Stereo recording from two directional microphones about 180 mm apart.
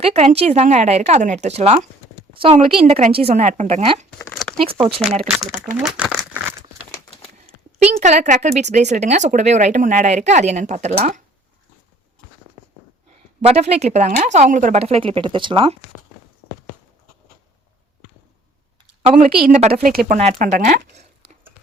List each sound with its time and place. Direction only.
0.0 s speech: 35° right (ahead or behind)
4.2 s a sound: 5° left (ahead or behind)
4.5 s speech: 30° right (ahead or behind)
5.8 s crumpling: 5° right (ahead or behind)
7.8 s speech: 40° right (ahead or behind)
13.4 s speech: 35° right (ahead or behind)
18.9 s a sound: 30° right (ahead or behind)
19.5 s speech: 40° right (ahead or behind)
19.9 s speech: 55° right (ahead or behind)
20.1 s speech: 40° right (ahead or behind)